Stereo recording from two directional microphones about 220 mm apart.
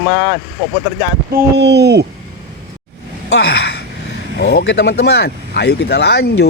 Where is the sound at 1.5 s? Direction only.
50° right (ahead or behind).